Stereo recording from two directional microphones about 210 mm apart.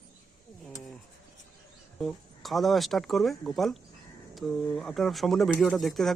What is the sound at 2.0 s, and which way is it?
Speech, centre (ahead or behind).